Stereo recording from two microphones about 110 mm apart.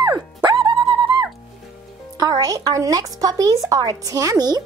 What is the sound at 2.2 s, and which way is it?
A woman's voice, 35° right (ahead or behind).